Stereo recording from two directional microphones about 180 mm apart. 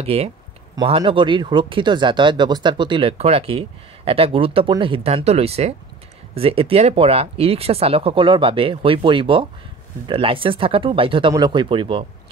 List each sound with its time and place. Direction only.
0.0 s speech: 35° right (ahead or behind)